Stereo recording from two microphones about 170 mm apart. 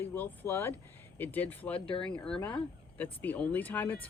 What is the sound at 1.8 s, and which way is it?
Speech, 30° left (ahead or behind).